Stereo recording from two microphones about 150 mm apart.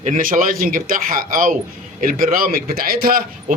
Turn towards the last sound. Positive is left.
turn(degrees=-80)